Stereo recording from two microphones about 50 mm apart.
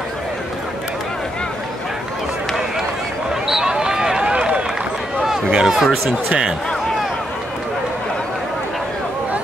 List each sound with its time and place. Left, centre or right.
3.4 s run: centre
5.2 s run: centre
5.9 s speech: centre